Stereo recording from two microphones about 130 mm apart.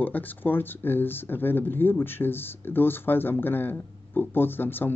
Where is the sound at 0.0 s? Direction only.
15° left (ahead or behind).